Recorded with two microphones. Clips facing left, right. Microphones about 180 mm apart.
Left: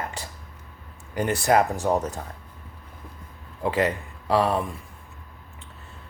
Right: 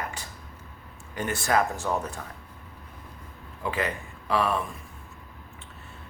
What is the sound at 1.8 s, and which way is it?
Speech, 35° left (ahead or behind).